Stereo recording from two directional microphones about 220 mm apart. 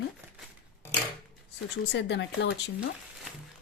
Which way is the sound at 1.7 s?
50° left (ahead or behind).